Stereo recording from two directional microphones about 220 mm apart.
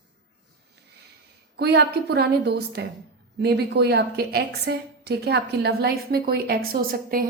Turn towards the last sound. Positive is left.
turn(degrees=-40)  # may be behind; listen again after turning